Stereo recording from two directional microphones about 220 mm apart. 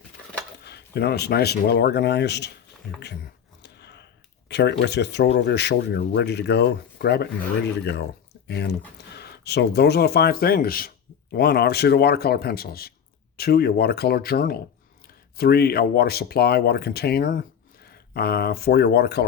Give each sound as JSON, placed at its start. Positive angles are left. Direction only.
{"t": 0.6, "sound": "speech", "side_deg": 45}
{"t": 3.6, "sound": "a sound", "side_deg": 50}
{"t": 4.4, "sound": "speech", "side_deg": 50}
{"t": 8.4, "sound": "speech", "side_deg": 50}